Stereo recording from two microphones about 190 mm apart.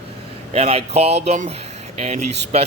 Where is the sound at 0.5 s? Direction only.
30° right (ahead or behind).